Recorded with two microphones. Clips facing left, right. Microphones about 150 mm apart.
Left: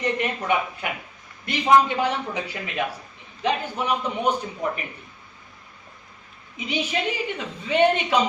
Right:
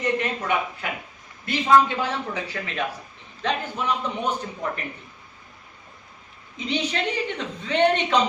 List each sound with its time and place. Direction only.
0.2 s speech: 15° left (ahead or behind)
6.7 s speech: 10° left (ahead or behind)